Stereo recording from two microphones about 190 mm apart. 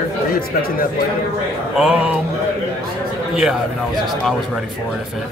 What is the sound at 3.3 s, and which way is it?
Speech, centre (ahead or behind).